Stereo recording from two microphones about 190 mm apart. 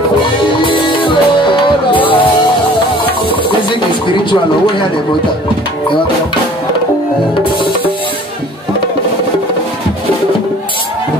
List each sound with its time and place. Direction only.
0.7 s music: 25° left (ahead or behind)
4.2 s speech: 25° left (ahead or behind)